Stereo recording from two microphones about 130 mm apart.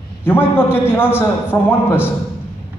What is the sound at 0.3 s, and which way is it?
A man's voice, 15° left (ahead or behind).